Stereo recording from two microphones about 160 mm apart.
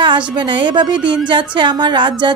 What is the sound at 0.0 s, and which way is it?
A woman's voice, 30° right (ahead or behind).